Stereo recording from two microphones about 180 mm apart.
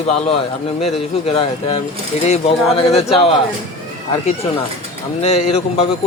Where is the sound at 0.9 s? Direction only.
30° left (ahead or behind).